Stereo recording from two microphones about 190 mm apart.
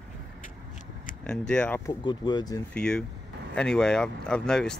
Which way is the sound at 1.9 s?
25° left (ahead or behind).